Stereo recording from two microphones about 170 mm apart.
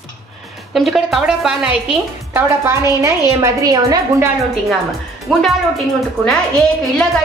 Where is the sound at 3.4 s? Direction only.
20° right (ahead or behind).